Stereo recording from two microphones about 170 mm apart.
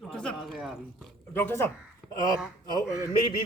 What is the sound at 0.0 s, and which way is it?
Speech, 5° left (ahead or behind).